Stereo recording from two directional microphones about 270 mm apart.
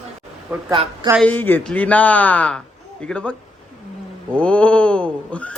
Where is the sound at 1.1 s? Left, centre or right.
Centre.